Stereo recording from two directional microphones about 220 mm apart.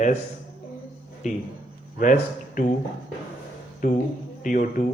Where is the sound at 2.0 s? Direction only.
35° left (ahead or behind).